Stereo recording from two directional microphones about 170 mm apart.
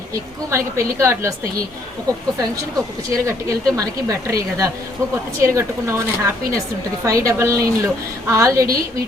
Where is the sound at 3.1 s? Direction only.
20° right (ahead or behind).